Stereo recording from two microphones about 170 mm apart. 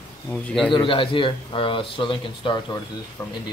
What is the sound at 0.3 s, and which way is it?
Speech, 5° left (ahead or behind).